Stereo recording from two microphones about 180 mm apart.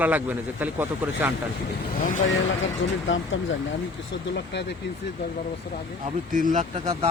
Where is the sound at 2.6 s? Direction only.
90° left.